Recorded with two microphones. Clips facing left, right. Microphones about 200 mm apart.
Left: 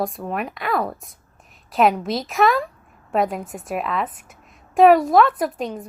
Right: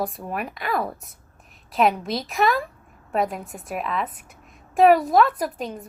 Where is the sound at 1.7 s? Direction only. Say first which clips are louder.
Left 3 dB; centre (ahead or behind).